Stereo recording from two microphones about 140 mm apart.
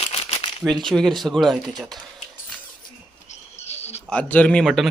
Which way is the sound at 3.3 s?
50° left (ahead or behind).